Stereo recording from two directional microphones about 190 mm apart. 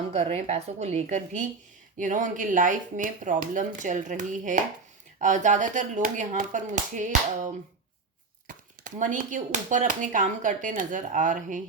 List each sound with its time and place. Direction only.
0.1 s speech: 35° right (ahead or behind)